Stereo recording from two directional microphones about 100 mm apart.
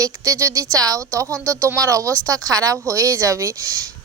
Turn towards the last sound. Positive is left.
turn(degrees=-30)  # may be behind; listen again after turning